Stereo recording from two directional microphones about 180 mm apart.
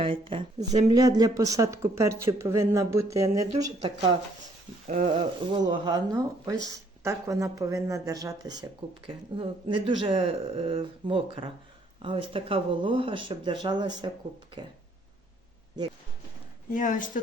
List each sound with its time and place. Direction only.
0.0 s speech: 30° right (ahead or behind)
4.9 s speech: 40° right (ahead or behind)
5.1 s speech: 25° right (ahead or behind)
16.7 s speech: 45° left (ahead or behind)